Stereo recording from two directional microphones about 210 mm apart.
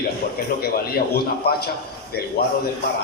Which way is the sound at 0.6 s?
50° left (ahead or behind).